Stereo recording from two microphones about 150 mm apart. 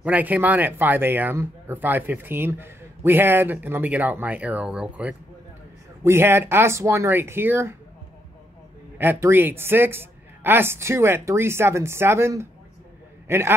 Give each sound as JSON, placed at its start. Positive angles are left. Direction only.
{"t": 0.0, "sound": "speech", "side_deg": -10}
{"t": 8.9, "sound": "speech", "side_deg": -15}